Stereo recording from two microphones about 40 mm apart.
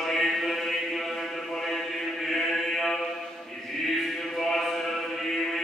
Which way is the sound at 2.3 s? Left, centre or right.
Centre.